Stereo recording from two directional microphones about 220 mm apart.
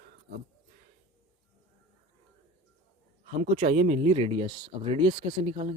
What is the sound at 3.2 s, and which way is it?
Speech, 35° right (ahead or behind).